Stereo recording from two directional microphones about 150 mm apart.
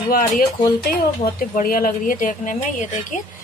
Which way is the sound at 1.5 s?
70° left (ahead or behind).